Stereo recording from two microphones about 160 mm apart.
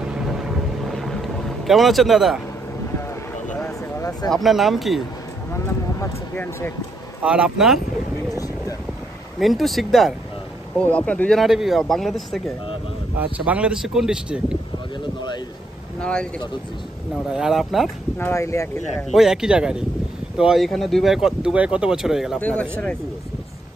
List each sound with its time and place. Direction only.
0.0 s boat: 5° right (ahead or behind)
4.3 s speech: centre (ahead or behind)
5.5 s speech: 15° left (ahead or behind)
7.2 s speech: 5° right (ahead or behind)
9.4 s speech: centre (ahead or behind)
16.0 s speech: 5° left (ahead or behind)
17.3 s speech: 5° right (ahead or behind)
18.2 s speech: 20° left (ahead or behind)
19.1 s speech: 5° right (ahead or behind)
22.4 s speech: 10° left (ahead or behind)